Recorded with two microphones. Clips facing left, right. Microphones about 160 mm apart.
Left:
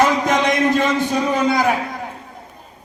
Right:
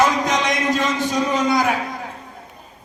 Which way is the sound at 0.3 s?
55° left (ahead or behind).